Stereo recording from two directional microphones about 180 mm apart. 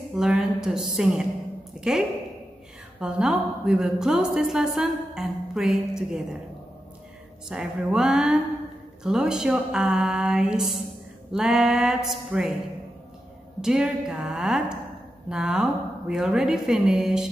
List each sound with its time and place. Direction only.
0.1 s a woman's voice: 5° right (ahead or behind)
7.4 s a woman's voice: 5° right (ahead or behind)
13.6 s a woman's voice: 5° right (ahead or behind)